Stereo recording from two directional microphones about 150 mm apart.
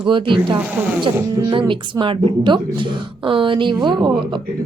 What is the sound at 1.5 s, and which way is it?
A woman's voice, 35° right (ahead or behind).